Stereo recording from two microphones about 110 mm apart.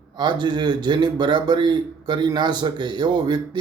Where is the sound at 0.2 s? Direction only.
45° right (ahead or behind).